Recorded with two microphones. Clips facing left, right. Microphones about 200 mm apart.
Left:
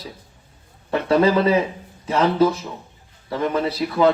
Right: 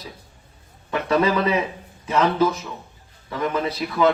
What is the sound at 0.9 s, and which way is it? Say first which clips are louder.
A man's voice: left 3 dB; 30° left (ahead or behind).